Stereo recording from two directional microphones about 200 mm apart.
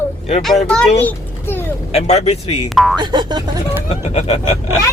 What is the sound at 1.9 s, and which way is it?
Speech, 30° left (ahead or behind).